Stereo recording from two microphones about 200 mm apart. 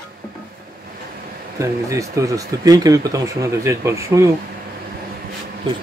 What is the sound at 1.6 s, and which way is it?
Speech, 15° right (ahead or behind).